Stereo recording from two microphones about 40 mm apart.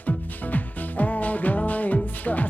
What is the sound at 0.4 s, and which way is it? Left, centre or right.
Music, left.